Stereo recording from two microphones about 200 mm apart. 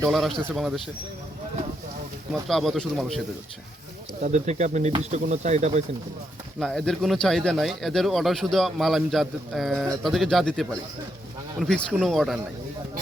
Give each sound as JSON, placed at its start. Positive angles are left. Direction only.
{"t": 0.1, "sound": "speech", "side_deg": 0}
{"t": 2.5, "sound": "speech", "side_deg": 0}
{"t": 4.2, "sound": "speech", "side_deg": -35}
{"t": 6.6, "sound": "speech", "side_deg": 0}